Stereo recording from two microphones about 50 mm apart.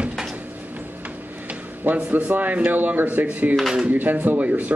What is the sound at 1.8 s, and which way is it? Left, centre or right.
Speech, right.